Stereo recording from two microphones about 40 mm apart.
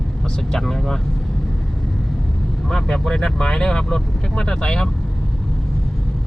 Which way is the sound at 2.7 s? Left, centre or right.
Centre.